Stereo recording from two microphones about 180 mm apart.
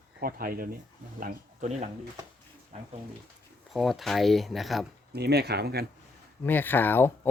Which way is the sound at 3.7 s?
Centre (ahead or behind).